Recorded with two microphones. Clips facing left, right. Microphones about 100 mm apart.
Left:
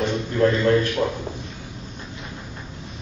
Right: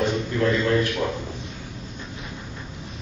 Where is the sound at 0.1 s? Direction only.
30° left (ahead or behind).